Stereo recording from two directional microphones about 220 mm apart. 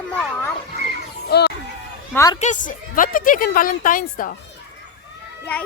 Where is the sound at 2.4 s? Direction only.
35° left (ahead or behind).